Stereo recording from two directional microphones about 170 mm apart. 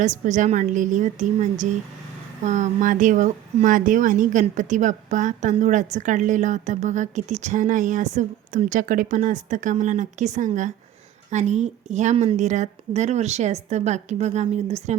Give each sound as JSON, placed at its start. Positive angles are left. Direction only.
{"t": 0.0, "sound": "a woman's voice", "side_deg": -45}